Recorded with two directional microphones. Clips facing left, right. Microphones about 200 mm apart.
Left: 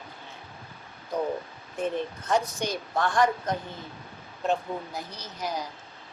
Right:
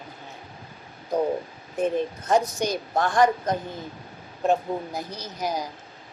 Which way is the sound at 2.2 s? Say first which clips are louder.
Right 4 dB; 40° right (ahead or behind).